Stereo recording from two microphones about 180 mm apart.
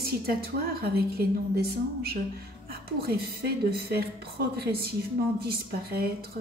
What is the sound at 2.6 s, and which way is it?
A woman's voice, 55° right (ahead or behind).